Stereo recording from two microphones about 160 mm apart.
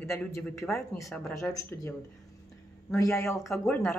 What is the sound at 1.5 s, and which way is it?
Speech, 15° left (ahead or behind).